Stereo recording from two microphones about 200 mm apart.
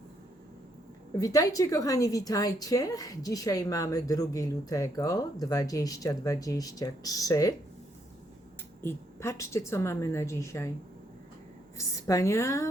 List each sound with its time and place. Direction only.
1.2 s a woman's voice: 15° left (ahead or behind)
8.8 s a woman's voice: 10° left (ahead or behind)
11.8 s a woman's voice: 15° left (ahead or behind)